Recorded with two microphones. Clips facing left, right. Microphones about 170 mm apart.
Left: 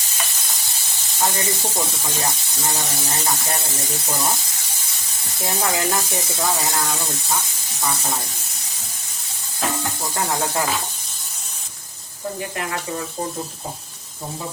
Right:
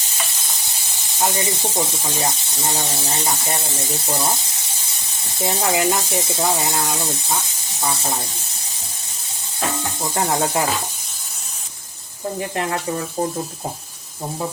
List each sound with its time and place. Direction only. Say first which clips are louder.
1.2 s speech: right 1 dB; 20° right (ahead or behind)
5.4 s speech: right 3 dB; 25° right (ahead or behind)
10.2 s speech: right 3 dB; 20° right (ahead or behind)